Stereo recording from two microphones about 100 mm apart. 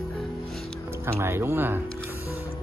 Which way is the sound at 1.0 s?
25° right (ahead or behind).